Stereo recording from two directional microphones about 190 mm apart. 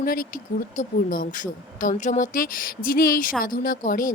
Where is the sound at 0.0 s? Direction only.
50° left (ahead or behind).